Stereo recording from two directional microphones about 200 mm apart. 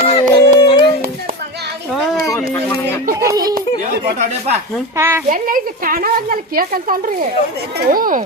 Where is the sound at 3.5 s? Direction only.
40° right (ahead or behind).